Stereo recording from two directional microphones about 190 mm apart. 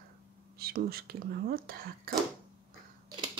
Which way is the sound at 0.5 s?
55° right (ahead or behind).